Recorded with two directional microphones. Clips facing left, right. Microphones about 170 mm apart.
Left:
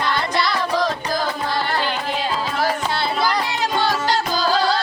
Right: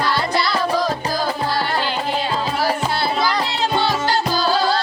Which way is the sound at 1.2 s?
35° right (ahead or behind).